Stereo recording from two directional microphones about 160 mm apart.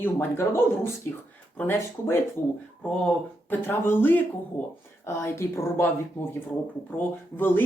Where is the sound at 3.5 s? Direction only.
15° left (ahead or behind).